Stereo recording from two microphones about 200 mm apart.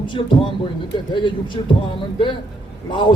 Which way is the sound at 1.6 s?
25° left (ahead or behind).